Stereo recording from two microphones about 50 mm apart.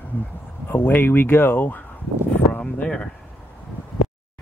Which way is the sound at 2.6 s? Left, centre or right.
Left.